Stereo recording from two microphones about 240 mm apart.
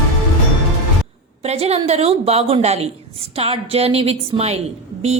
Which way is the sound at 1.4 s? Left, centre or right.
Right.